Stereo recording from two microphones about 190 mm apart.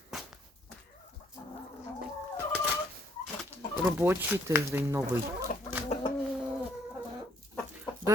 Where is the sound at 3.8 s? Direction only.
10° right (ahead or behind).